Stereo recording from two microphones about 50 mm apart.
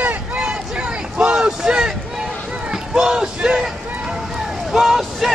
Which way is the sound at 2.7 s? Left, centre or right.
Centre.